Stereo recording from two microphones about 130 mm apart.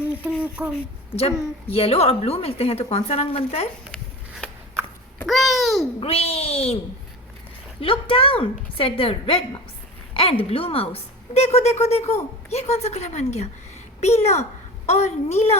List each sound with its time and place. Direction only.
0.4 s speech: 10° right (ahead or behind)
1.1 s a woman's voice: 50° left (ahead or behind)
3.9 s a sound: 5° left (ahead or behind)
5.3 s a child's voice: centre (ahead or behind)
6.0 s a woman's voice: 50° left (ahead or behind)
7.8 s a woman's voice: 45° left (ahead or behind)